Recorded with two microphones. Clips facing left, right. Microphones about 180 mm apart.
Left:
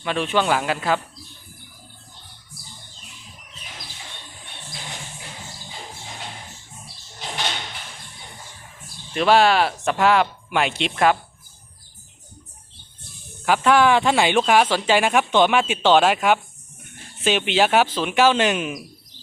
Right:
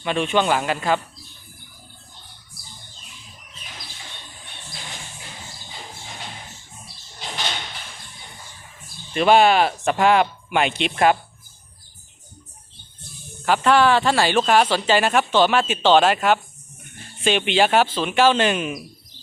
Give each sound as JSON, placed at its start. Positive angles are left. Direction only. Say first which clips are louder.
{"t": 0.0, "sound": "speech", "louder": "right 1 dB", "side_deg": 0}
{"t": 9.1, "sound": "speech", "louder": "right 1 dB", "side_deg": 0}
{"t": 13.4, "sound": "speech", "louder": "even", "side_deg": 10}